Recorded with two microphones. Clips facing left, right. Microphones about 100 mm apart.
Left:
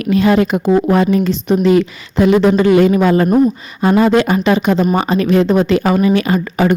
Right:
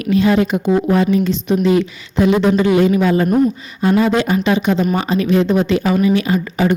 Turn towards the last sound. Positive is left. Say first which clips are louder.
# left 2 dB
turn(degrees=60)  # may be behind; listen again after turning